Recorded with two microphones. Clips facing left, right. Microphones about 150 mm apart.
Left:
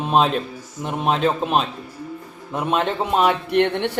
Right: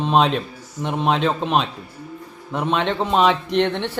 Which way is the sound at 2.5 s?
5° left (ahead or behind).